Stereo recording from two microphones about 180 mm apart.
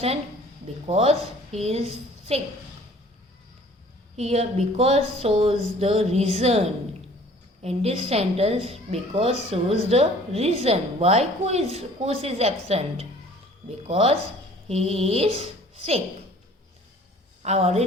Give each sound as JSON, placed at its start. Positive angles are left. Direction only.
{"t": 0.9, "sound": "a woman's voice", "side_deg": -35}
{"t": 4.2, "sound": "a woman's voice", "side_deg": -35}
{"t": 7.6, "sound": "a woman's voice", "side_deg": -35}
{"t": 17.4, "sound": "a woman's voice", "side_deg": -35}